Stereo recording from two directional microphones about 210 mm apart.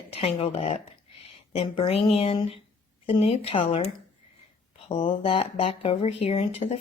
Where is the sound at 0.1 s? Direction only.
30° left (ahead or behind).